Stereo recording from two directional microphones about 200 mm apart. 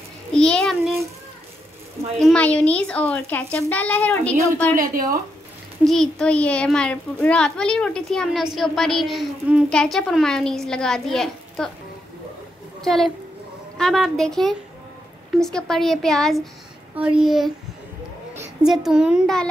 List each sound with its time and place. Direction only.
0.3 s a sound: 5° left (ahead or behind)
2.1 s a child's voice: 5° left (ahead or behind)
4.7 s speech: 45° right (ahead or behind)
5.9 s a woman's voice: 5° left (ahead or behind)
12.8 s a woman's voice: centre (ahead or behind)
18.6 s a woman's voice: centre (ahead or behind)